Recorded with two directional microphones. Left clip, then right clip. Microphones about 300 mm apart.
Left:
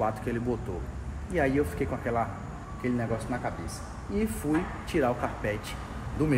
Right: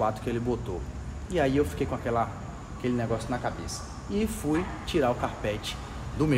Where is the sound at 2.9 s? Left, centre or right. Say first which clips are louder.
Right 3 dB; centre.